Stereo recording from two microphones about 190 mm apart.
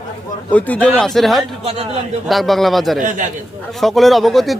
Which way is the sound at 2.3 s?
Centre (ahead or behind).